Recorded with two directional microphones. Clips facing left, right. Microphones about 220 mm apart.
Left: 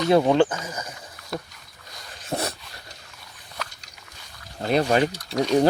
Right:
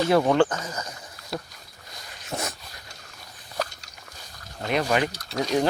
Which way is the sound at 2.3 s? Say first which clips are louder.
Left 4 dB; 35° left (ahead or behind).